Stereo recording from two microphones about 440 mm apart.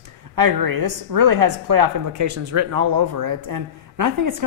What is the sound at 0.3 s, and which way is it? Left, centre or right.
Speech, right.